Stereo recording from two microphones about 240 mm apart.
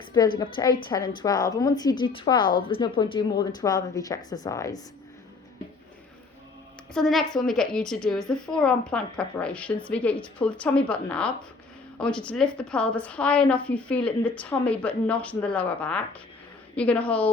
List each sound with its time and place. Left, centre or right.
0.0 s a woman's voice: centre
6.9 s a woman's voice: centre